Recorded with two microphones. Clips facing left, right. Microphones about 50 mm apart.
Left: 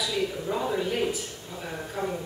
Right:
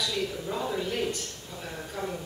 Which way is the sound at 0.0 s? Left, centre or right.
Centre.